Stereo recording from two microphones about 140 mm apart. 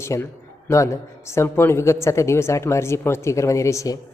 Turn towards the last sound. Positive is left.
turn(degrees=20)  # may be behind; listen again after turning